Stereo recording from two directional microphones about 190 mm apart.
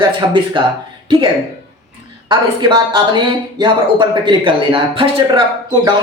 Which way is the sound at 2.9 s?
25° right (ahead or behind).